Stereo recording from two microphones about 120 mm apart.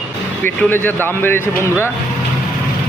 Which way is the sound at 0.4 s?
15° left (ahead or behind).